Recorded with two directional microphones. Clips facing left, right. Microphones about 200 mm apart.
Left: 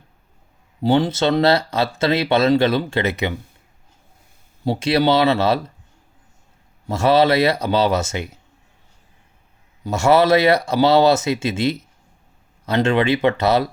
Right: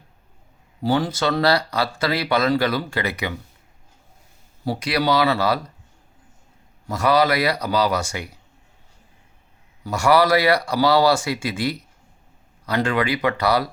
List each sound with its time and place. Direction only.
0.8 s speech: 25° left (ahead or behind)
4.6 s speech: 25° left (ahead or behind)
6.8 s speech: 25° left (ahead or behind)
9.8 s speech: 25° left (ahead or behind)